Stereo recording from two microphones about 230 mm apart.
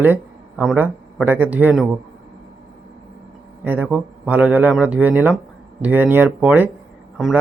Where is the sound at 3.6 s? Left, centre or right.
Centre.